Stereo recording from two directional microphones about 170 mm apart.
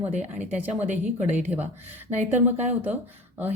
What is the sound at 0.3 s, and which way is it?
Speech, 10° right (ahead or behind).